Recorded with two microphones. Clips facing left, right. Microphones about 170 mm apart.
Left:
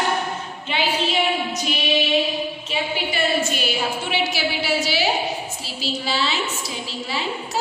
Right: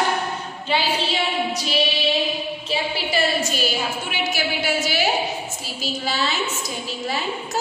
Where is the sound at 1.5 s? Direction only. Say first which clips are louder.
Right 1 dB; 35° right (ahead or behind).